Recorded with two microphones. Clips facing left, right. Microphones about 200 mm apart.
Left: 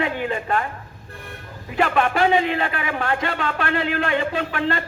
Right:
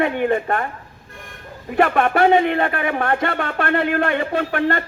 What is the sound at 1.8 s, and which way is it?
Speech, 60° right (ahead or behind).